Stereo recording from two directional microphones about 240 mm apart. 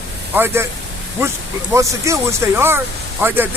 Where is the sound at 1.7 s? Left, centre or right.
Centre.